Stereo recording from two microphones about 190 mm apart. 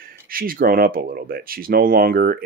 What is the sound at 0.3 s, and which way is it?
Speech, 50° right (ahead or behind).